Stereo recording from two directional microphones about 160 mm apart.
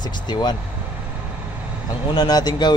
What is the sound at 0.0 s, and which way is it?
Speech, 25° left (ahead or behind).